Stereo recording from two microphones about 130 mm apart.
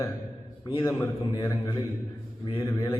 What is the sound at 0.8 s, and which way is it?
Speech, 25° left (ahead or behind).